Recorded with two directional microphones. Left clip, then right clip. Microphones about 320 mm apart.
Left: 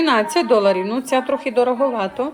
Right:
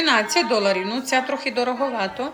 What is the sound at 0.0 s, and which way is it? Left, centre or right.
A woman's voice, centre.